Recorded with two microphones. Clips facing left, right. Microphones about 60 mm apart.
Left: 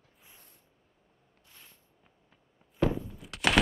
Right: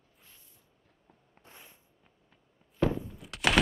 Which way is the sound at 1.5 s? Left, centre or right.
Centre.